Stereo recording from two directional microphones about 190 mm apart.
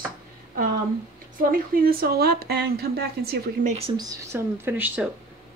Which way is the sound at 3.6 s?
30° right (ahead or behind).